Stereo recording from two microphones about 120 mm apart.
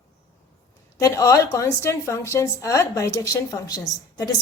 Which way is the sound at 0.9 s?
25° left (ahead or behind).